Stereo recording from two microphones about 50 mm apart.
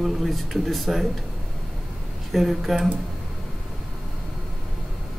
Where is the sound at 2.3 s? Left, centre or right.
Centre.